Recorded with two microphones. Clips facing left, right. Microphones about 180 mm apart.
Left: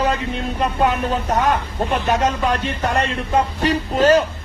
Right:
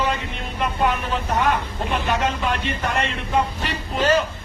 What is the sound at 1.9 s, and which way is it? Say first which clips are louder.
A man's voice: left 3 dB; 45° left (ahead or behind).